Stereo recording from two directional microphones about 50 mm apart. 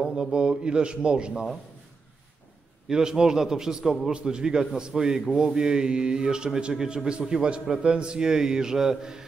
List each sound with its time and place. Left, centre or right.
0.0 s a man's voice: centre
2.9 s a man's voice: centre